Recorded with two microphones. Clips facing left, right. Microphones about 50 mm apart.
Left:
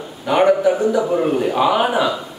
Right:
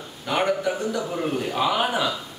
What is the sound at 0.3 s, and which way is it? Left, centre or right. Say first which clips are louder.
Speech: left 9 dB; centre.